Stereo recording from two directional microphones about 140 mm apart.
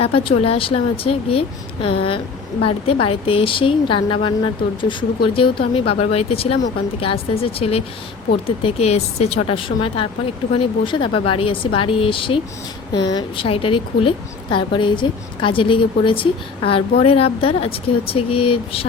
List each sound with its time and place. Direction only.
0.0 s a woman's voice: 40° left (ahead or behind)